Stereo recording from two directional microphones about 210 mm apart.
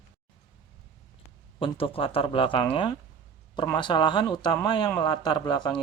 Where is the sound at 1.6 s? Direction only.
25° left (ahead or behind).